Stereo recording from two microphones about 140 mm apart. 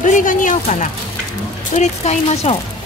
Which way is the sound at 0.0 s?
65° left (ahead or behind).